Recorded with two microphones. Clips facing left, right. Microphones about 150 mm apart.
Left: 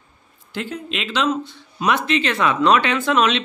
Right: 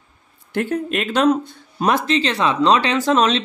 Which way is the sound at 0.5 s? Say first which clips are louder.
Right 7 dB; 55° right (ahead or behind).